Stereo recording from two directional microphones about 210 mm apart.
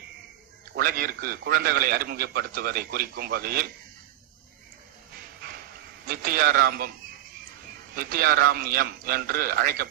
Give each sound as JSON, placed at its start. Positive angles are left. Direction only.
{"t": 0.8, "sound": "a man's voice", "side_deg": -45}
{"t": 6.1, "sound": "a man's voice", "side_deg": -45}
{"t": 7.9, "sound": "a man's voice", "side_deg": -45}